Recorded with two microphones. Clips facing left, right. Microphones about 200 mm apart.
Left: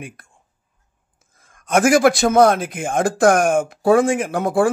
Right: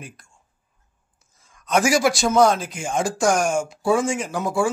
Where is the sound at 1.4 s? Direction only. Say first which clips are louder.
Left 4 dB; 55° left (ahead or behind).